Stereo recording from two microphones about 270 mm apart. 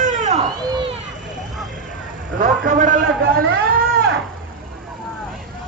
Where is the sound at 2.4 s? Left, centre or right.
Right.